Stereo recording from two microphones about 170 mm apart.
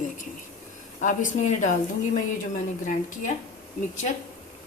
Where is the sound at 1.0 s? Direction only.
45° left (ahead or behind).